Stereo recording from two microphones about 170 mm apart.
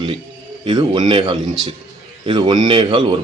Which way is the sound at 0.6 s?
30° right (ahead or behind).